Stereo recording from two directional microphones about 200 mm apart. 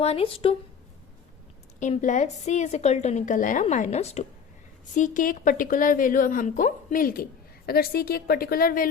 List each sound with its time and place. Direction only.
0.0 s speech: 30° left (ahead or behind)
1.8 s a woman's voice: 40° left (ahead or behind)